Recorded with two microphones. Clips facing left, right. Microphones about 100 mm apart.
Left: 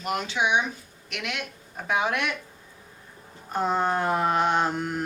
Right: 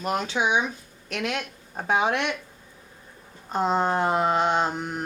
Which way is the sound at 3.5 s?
20° right (ahead or behind).